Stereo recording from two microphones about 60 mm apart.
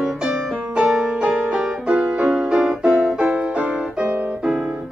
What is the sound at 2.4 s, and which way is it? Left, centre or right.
Music, centre.